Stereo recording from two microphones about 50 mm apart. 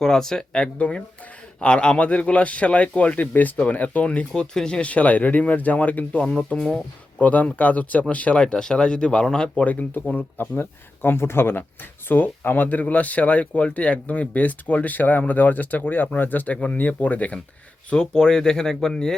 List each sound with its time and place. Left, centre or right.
0.0 s speech: centre; by 4.3 s left
4.4 s speech: centre
4.8 s speech: left
6.2 s speech: left
7.2 s speech: left
9.6 s speech: left
10.6 s speech: left
17.8 s speech: centre